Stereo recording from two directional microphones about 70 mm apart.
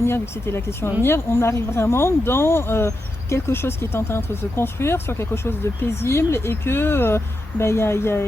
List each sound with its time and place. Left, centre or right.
0.0 s speech: left